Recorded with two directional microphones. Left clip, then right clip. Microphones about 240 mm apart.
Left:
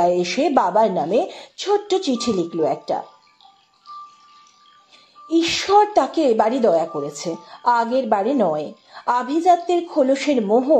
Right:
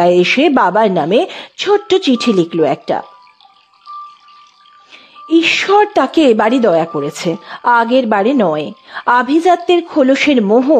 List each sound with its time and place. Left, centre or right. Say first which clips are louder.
0.0 s speech: right 8 dB; right
5.3 s speech: right 6 dB; right